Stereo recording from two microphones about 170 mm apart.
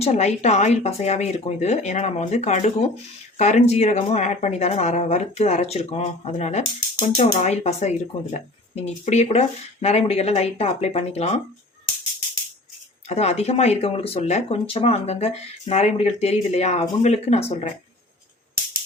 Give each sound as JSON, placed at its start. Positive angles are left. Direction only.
{"t": 0.0, "sound": "speech", "side_deg": 40}
{"t": 13.1, "sound": "speech", "side_deg": 40}